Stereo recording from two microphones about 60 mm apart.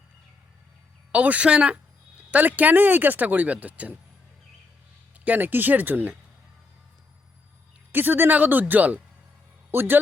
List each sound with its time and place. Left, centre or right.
1.1 s speech: right
2.3 s speech: right
5.2 s speech: right
7.9 s speech: right